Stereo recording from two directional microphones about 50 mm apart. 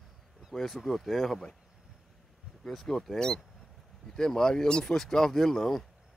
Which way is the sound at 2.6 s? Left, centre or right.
Centre.